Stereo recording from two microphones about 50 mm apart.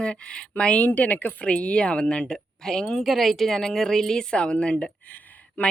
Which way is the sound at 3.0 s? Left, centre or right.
Centre.